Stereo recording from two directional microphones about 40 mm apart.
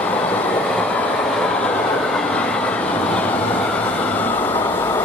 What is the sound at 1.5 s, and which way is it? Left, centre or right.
Train, left.